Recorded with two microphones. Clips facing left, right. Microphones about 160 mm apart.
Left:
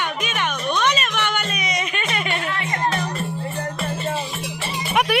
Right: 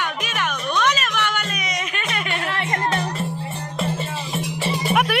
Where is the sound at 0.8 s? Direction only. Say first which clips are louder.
Even; centre (ahead or behind).